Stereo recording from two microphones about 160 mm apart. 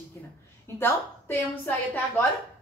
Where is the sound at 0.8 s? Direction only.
15° left (ahead or behind).